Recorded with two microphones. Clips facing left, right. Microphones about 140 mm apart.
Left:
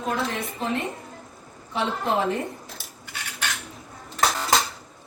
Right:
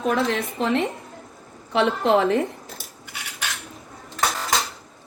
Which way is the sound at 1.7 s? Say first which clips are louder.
Right 6 dB; 70° right (ahead or behind).